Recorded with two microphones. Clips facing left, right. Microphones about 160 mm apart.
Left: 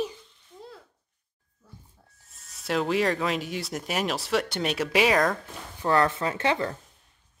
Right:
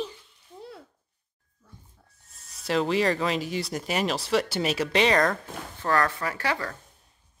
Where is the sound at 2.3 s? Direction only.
Centre (ahead or behind).